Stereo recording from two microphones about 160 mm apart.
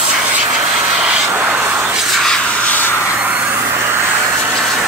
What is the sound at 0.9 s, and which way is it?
Vehicle, 5° right (ahead or behind).